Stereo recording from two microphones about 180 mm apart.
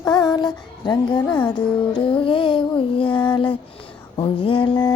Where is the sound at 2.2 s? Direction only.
30° left (ahead or behind).